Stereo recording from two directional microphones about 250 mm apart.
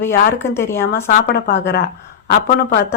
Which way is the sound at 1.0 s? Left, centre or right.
Left.